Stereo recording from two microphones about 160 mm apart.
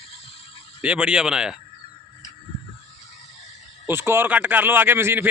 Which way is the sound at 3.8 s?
15° right (ahead or behind).